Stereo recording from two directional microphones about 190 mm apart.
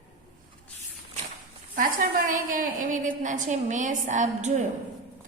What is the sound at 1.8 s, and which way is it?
A woman's voice, 45° right (ahead or behind).